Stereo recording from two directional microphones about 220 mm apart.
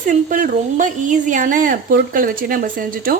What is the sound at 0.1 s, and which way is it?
A woman's voice, 35° right (ahead or behind).